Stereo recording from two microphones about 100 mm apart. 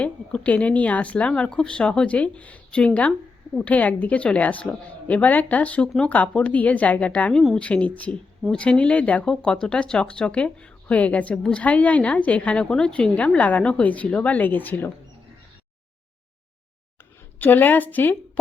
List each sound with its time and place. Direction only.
0.0 s speech: 15° left (ahead or behind)
17.4 s speech: 20° left (ahead or behind)